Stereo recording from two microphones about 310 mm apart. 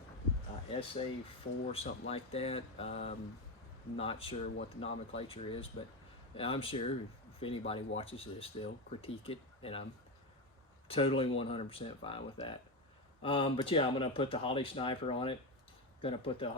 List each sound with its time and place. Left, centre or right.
0.7 s speech: centre
4.5 s speech: left
5.1 s speech: centre
10.8 s speech: centre